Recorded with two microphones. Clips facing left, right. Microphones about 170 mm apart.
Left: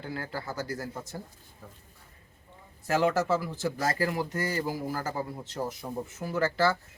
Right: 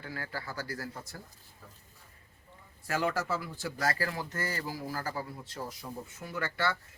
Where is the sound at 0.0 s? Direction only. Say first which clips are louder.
Left 4 dB; 25° left (ahead or behind).